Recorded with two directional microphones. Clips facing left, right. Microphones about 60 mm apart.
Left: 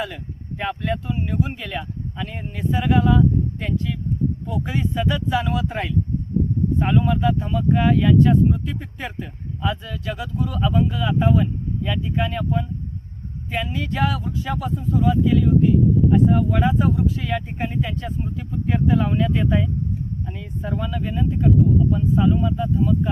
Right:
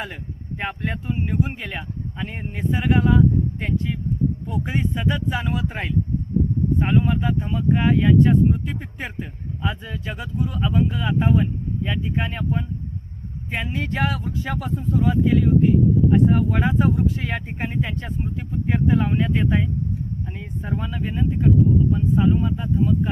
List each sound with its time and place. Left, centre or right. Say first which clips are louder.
0.6 s speech: left 3 dB; right